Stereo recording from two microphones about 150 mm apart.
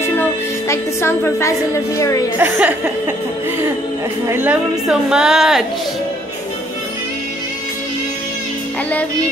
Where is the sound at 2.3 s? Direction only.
10° right (ahead or behind).